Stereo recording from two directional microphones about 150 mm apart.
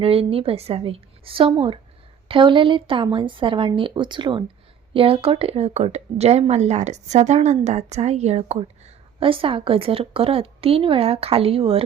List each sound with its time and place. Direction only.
0.0 s a woman's voice: 40° right (ahead or behind)
9.2 s a woman's voice: 35° right (ahead or behind)